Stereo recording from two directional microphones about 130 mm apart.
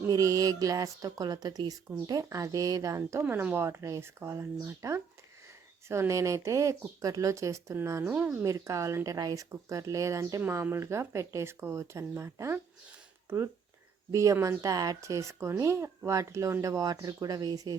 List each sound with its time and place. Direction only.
0.0 s speech: 25° right (ahead or behind)
8.4 s speech: 25° right (ahead or behind)